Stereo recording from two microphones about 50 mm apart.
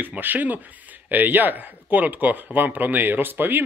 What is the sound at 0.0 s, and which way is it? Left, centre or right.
Speech, right.